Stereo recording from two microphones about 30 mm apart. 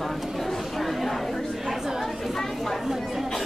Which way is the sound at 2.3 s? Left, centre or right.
Centre.